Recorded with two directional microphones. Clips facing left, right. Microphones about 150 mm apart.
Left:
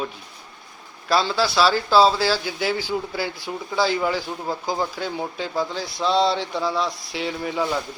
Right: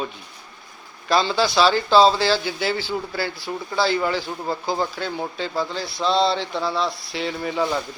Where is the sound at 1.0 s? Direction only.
5° left (ahead or behind).